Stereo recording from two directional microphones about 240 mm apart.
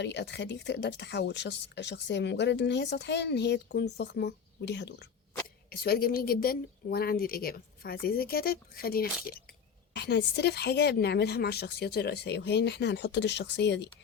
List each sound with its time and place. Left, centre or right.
0.0 s a woman's voice: left